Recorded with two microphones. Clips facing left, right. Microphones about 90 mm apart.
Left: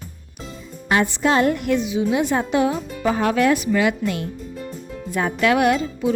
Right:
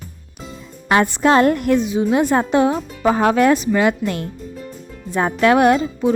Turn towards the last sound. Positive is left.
turn(degrees=-35)  # may be behind; listen again after turning